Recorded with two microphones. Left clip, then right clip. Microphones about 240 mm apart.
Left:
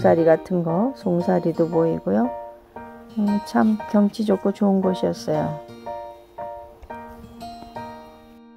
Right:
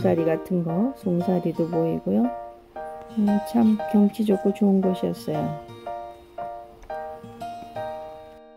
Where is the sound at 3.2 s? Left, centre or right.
Centre.